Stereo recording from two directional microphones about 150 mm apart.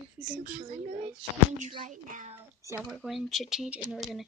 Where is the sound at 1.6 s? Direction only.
55° right (ahead or behind).